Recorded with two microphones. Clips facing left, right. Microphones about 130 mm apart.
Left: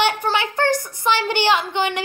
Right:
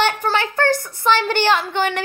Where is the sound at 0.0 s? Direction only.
15° left (ahead or behind).